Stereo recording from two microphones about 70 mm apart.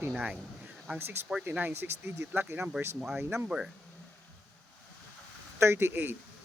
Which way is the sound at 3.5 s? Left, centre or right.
Centre.